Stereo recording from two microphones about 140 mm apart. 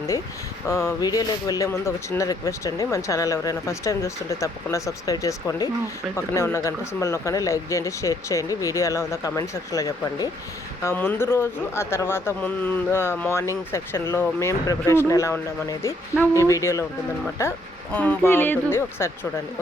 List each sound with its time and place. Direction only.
0.7 s speech: 20° left (ahead or behind)